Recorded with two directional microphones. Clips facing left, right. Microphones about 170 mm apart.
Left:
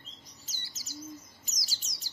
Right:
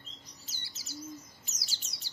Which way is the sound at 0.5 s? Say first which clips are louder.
Right 1 dB; 40° left (ahead or behind).